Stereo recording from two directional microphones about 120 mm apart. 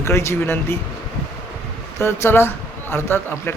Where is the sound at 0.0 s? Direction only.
20° left (ahead or behind).